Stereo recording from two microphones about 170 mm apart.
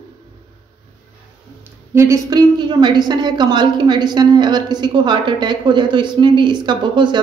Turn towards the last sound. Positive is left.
turn(degrees=-25)  # may be behind; listen again after turning